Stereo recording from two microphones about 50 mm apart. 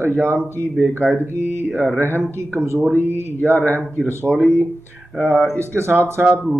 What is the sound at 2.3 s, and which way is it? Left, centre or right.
A man's voice, right.